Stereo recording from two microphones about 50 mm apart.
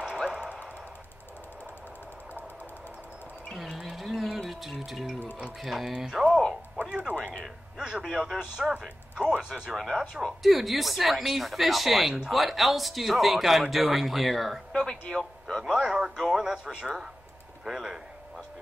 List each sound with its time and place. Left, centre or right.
0.0 s a sound: centre
3.6 s a sound: centre
4.5 s music: centre
5.6 s speech: centre
6.8 s music: right
7.4 s speech: centre
9.1 s speech: right
9.4 s speech: centre
14.8 s a sound: centre
15.7 s radio: centre
16.2 s speech: centre